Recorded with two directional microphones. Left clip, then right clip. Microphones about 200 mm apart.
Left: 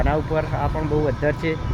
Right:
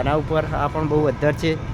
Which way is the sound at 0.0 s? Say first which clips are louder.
Right 1 dB; 15° right (ahead or behind).